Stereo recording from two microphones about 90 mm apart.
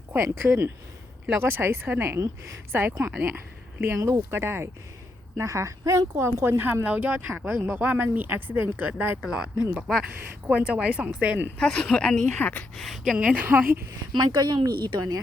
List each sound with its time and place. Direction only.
0.3 s speech: 25° right (ahead or behind)
9.2 s a woman's voice: 10° right (ahead or behind)
10.4 s a woman's voice: 15° right (ahead or behind)
11.5 s speech: 10° left (ahead or behind)
12.7 s speech: centre (ahead or behind)
13.1 s a woman's voice: 15° right (ahead or behind)
14.1 s speech: 55° right (ahead or behind)